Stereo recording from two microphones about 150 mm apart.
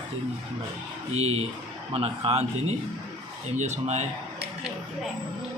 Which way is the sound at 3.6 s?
50° right (ahead or behind).